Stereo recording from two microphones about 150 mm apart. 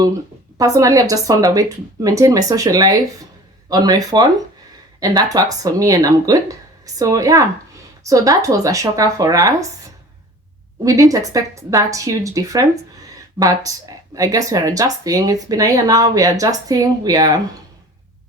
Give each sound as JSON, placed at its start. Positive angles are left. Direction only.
{"t": 0.6, "sound": "speech", "side_deg": -25}
{"t": 10.8, "sound": "speech", "side_deg": -20}